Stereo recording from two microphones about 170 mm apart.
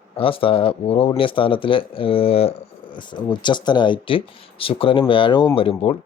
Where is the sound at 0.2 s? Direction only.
35° left (ahead or behind).